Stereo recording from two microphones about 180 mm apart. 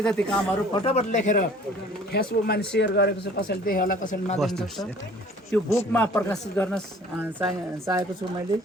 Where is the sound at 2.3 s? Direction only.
60° left (ahead or behind); by 4.3 s 45° left (ahead or behind).